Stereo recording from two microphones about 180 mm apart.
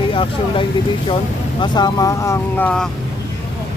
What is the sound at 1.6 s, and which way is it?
Speech, 25° left (ahead or behind).